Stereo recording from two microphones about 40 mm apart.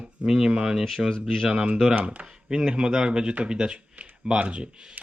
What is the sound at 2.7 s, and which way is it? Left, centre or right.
Speech, centre.